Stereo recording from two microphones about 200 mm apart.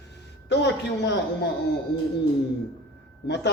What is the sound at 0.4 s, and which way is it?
Speech, 60° left (ahead or behind).